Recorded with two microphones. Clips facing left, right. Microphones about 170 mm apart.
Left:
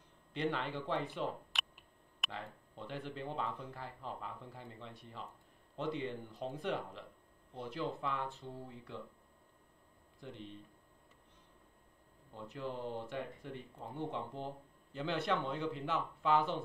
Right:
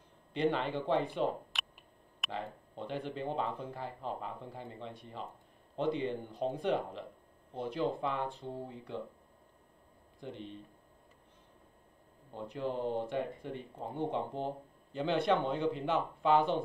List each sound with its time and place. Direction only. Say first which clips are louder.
0.3 s speech: right 6 dB; 25° right (ahead or behind)
10.2 s speech: right 5 dB; 20° right (ahead or behind)
12.4 s speech: right 6 dB; 25° right (ahead or behind)